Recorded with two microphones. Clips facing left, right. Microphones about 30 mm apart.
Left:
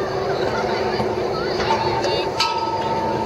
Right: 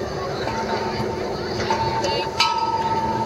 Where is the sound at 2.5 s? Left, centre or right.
Centre.